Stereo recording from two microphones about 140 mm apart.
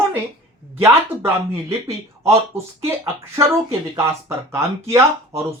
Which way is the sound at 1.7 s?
20° right (ahead or behind).